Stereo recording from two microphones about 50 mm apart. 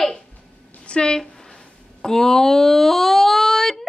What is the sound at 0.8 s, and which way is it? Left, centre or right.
Speech, centre.